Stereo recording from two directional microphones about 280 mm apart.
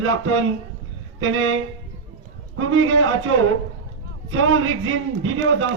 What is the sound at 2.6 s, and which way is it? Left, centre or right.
Speech, right.